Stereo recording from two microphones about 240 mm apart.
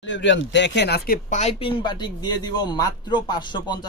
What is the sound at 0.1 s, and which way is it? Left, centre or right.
Speech, left.